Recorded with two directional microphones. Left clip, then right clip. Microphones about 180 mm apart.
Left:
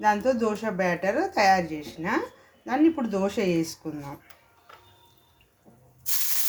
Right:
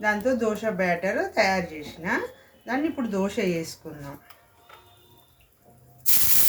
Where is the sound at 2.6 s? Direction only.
35° left (ahead or behind).